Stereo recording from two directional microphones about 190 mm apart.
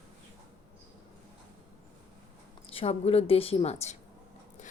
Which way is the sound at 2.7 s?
30° left (ahead or behind).